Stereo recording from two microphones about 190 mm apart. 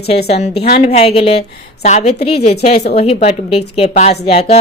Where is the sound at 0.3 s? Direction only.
35° left (ahead or behind).